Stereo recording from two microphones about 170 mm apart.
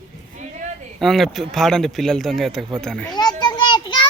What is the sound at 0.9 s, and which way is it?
Speech, centre (ahead or behind).